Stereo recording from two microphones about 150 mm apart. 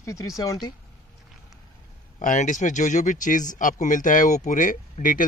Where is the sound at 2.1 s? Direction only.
55° left (ahead or behind).